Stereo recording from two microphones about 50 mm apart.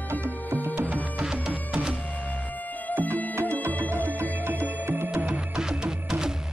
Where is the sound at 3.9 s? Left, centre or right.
Right.